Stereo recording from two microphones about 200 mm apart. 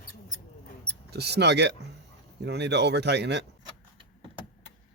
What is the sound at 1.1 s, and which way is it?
Speech, 55° right (ahead or behind).